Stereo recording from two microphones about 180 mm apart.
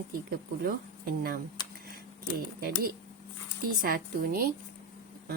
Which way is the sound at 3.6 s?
55° right (ahead or behind).